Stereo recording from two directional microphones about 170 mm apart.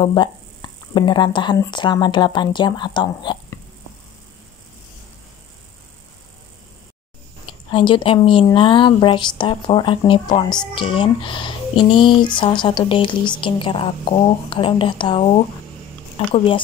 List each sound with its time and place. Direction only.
0.0 s speech: 25° left (ahead or behind)
7.7 s a woman's voice: 30° left (ahead or behind)